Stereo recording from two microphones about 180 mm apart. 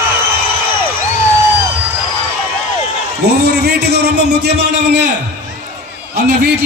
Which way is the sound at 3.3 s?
65° right (ahead or behind).